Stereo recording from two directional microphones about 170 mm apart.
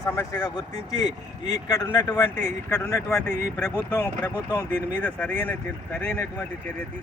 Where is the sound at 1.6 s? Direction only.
20° left (ahead or behind).